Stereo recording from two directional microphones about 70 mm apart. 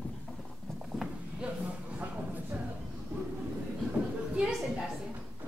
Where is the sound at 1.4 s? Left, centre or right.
Centre.